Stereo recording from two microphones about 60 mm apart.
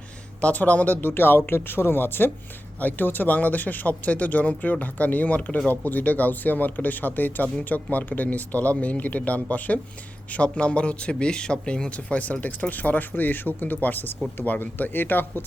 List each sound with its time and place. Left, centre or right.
0.4 s a man's voice: left